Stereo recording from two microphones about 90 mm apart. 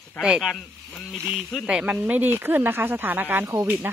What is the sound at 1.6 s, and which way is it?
Speech, 15° right (ahead or behind).